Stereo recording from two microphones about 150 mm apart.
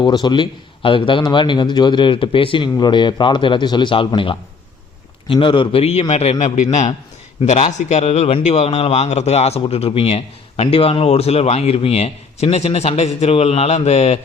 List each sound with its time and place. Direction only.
0.0 s a man's voice: 30° left (ahead or behind); by 14.2 s 45° left (ahead or behind)